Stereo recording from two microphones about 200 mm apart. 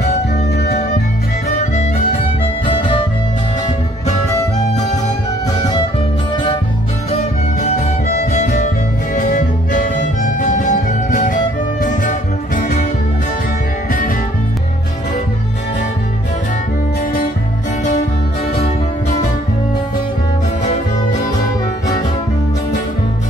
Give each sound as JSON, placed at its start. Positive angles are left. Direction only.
{"t": 2.6, "sound": "music", "side_deg": 25}
{"t": 5.6, "sound": "music", "side_deg": 20}
{"t": 7.6, "sound": "music", "side_deg": 35}